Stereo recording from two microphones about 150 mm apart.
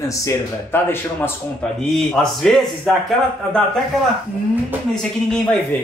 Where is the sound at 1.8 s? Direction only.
5° left (ahead or behind).